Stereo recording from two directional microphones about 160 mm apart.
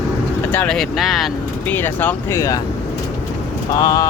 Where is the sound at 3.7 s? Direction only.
25° left (ahead or behind).